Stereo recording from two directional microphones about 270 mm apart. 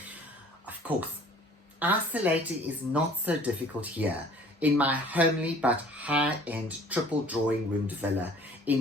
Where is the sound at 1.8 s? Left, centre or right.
Centre.